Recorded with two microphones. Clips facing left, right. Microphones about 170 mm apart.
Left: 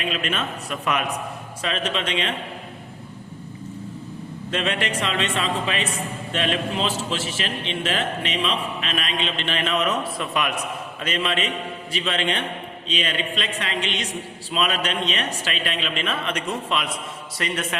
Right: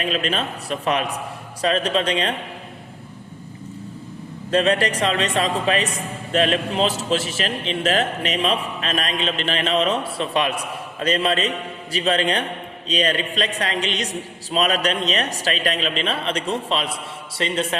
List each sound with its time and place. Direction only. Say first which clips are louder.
0.0 s a man's voice: right 3 dB; 35° right (ahead or behind)
4.5 s a man's voice: right 7 dB; 40° right (ahead or behind)